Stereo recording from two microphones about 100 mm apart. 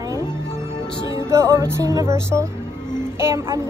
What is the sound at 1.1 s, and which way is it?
Music, 30° right (ahead or behind).